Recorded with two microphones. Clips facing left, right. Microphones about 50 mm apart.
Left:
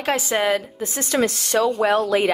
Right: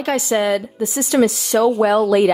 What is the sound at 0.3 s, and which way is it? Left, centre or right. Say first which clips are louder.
Speech: right 3 dB; left.